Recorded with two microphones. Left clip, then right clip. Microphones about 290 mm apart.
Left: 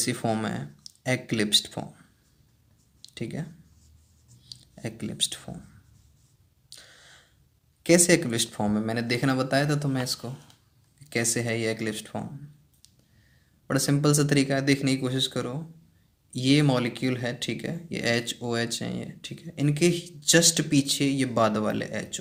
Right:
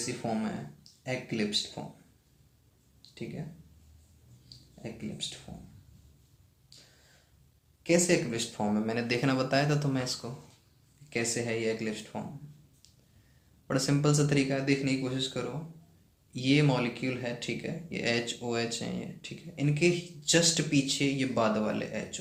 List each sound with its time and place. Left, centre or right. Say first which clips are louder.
0.0 s speech: left 6 dB; left
4.4 s a sound: left 6 dB; left
7.9 s speech: left 6 dB; left
13.7 s speech: left 4 dB; left